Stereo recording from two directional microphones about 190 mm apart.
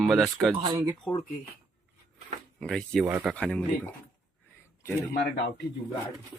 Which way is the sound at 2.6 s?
5° left (ahead or behind).